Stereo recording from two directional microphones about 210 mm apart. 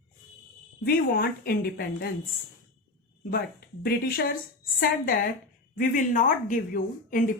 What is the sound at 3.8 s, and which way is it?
A woman's voice, 45° left (ahead or behind).